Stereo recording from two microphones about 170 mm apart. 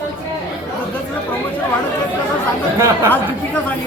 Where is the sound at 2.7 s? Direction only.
20° right (ahead or behind).